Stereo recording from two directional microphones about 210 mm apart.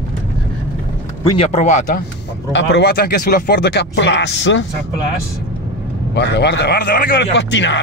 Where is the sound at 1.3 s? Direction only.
30° left (ahead or behind).